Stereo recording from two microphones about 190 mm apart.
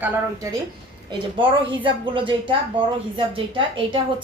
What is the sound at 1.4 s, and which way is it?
A woman's voice, 25° right (ahead or behind).